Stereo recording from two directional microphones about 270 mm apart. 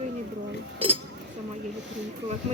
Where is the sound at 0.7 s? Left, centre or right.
Centre.